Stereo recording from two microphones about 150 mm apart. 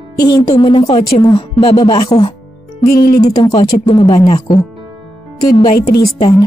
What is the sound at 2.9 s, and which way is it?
Speech, 80° left.